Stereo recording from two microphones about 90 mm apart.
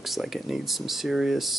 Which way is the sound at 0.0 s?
Centre (ahead or behind).